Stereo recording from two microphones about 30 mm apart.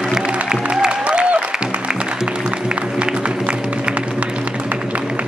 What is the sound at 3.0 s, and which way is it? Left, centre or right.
Music, right.